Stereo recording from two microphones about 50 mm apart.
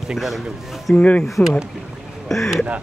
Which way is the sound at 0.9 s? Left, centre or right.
Left.